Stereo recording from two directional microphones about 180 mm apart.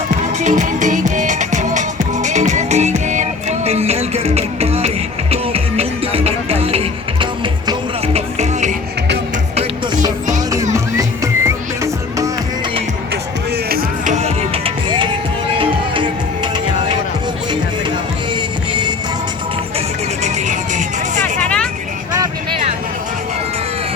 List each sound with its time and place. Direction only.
0.3 s music: 45° right (ahead or behind)
10.8 s music: 15° right (ahead or behind)
13.7 s music: 50° right (ahead or behind); by 16.5 s 30° right (ahead or behind)
18.3 s music: 25° right (ahead or behind)
20.2 s music: 40° right (ahead or behind)
21.4 s vehicle: 5° left (ahead or behind)